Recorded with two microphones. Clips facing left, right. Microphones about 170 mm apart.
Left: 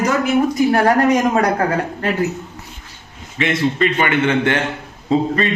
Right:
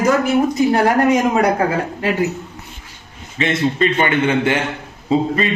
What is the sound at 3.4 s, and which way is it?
Speech, 25° right (ahead or behind).